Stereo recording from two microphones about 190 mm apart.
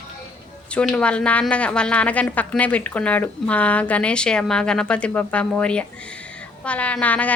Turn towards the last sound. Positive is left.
turn(degrees=10)  # may be behind; listen again after turning